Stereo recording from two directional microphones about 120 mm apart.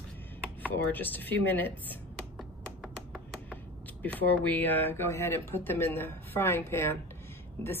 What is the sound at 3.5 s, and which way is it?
Speech, 15° left (ahead or behind).